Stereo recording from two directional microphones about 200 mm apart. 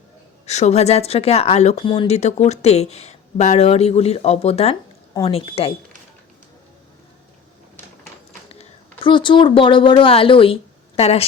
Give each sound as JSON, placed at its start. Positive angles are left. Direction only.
{"t": 0.4, "sound": "a woman's voice", "side_deg": 35}
{"t": 8.4, "sound": "speech", "side_deg": 30}